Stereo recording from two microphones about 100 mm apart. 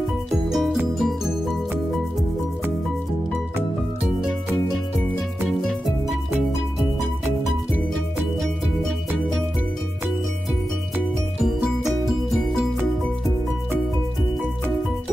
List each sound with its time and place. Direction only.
0.3 s music: centre (ahead or behind)
5.7 s music: centre (ahead or behind)
11.4 s music: 5° right (ahead or behind)